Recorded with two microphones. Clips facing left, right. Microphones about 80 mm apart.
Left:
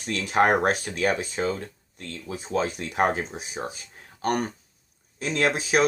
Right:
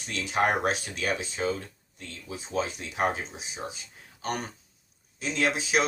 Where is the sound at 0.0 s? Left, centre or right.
Left.